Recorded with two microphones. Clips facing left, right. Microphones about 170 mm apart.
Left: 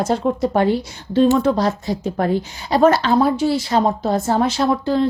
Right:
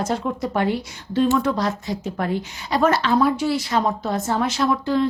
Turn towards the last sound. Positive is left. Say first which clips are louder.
# left 2 dB
turn(degrees=30)  # may be behind; listen again after turning